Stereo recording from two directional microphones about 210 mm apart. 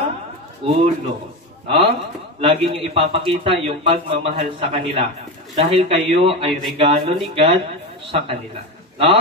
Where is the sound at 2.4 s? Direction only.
25° right (ahead or behind).